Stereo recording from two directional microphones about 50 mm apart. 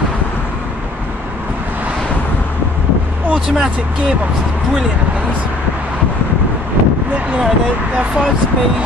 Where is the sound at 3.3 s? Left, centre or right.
Centre.